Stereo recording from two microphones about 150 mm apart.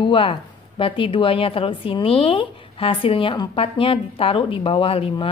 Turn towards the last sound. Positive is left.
turn(degrees=40)  # may be behind; listen again after turning